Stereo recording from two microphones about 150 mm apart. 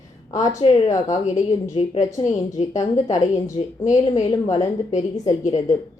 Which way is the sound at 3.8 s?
55° left (ahead or behind).